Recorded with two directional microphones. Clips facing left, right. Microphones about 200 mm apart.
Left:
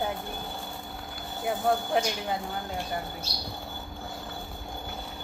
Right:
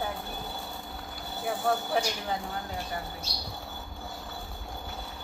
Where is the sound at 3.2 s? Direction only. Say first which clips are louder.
Left 2 dB; centre (ahead or behind).